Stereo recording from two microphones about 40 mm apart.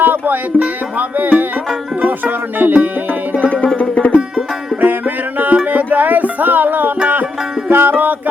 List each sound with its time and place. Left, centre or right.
0.0 s music: right
0.6 s music: right
3.4 s music: left
4.8 s music: right
7.7 s music: right